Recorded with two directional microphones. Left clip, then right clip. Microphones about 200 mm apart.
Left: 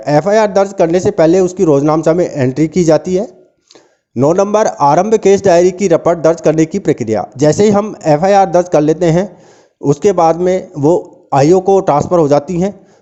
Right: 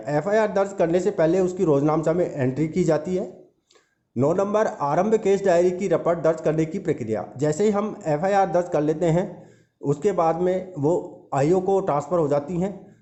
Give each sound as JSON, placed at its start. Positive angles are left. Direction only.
{"t": 0.0, "sound": "a man's voice", "side_deg": 40}